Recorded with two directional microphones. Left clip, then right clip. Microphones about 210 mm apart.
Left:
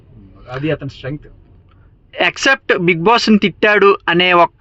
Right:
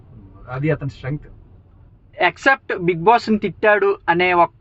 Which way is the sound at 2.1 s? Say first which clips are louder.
Left 2 dB; 40° left (ahead or behind).